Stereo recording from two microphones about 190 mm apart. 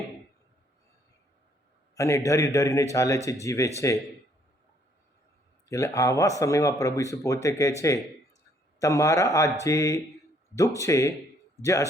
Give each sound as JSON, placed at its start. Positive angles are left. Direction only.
{"t": 2.0, "sound": "speech", "side_deg": 15}
{"t": 5.6, "sound": "speech", "side_deg": 15}